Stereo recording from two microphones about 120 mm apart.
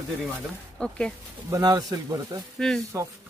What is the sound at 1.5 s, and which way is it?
Speech, 30° right (ahead or behind).